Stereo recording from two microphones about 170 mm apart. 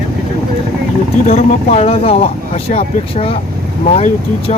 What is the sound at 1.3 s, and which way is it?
Speech, 35° left (ahead or behind).